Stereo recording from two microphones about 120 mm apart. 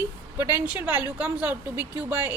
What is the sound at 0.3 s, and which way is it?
Speech, 15° right (ahead or behind).